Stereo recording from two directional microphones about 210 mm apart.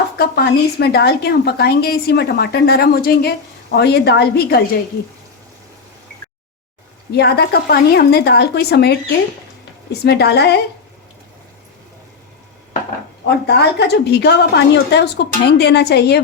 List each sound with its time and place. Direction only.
0.2 s a woman's voice: 50° left (ahead or behind)
7.1 s a woman's voice: 50° left (ahead or behind)
13.5 s a woman's voice: 50° left (ahead or behind)